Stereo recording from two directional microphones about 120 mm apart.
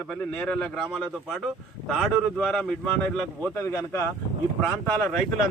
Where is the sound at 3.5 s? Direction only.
20° left (ahead or behind).